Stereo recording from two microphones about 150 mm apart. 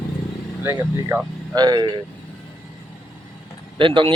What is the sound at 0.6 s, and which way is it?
Speech, 15° right (ahead or behind).